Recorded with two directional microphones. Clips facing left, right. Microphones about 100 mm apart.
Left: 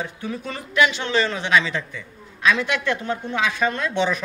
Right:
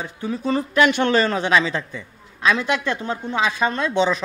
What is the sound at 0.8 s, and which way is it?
A man's voice, 50° right (ahead or behind).